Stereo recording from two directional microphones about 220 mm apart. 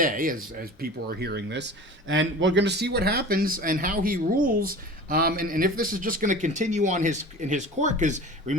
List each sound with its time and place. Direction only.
0.0 s speech: 40° right (ahead or behind)